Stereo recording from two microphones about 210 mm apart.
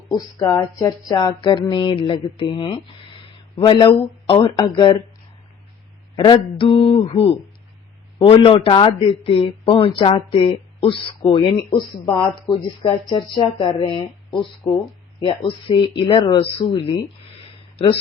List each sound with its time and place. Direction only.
0.3 s a man's voice: 15° left (ahead or behind)
6.1 s a man's voice: 20° left (ahead or behind)